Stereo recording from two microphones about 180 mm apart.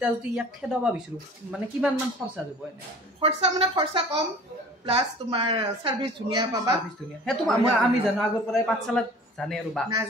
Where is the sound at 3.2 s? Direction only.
35° right (ahead or behind).